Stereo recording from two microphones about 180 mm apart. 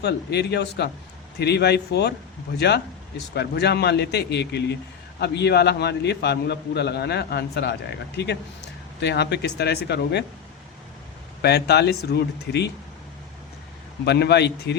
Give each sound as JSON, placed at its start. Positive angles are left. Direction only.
{"t": 0.0, "sound": "a man's voice", "side_deg": 70}
{"t": 11.4, "sound": "a man's voice", "side_deg": 65}
{"t": 14.0, "sound": "a man's voice", "side_deg": 65}